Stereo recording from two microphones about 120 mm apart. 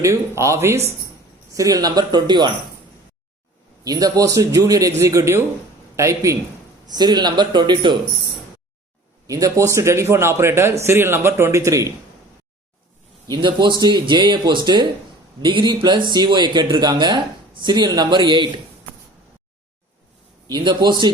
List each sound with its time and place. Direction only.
0.0 s a man's voice: 25° right (ahead or behind)
3.8 s a man's voice: 30° right (ahead or behind)
9.2 s a man's voice: 30° right (ahead or behind)
13.2 s speech: 40° right (ahead or behind)
20.5 s speech: 40° right (ahead or behind)